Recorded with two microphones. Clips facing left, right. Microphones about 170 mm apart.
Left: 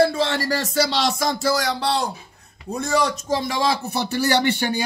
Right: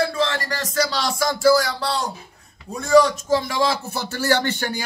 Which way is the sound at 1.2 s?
20° left (ahead or behind).